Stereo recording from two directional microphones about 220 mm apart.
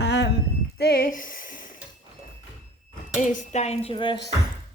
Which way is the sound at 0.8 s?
40° left (ahead or behind).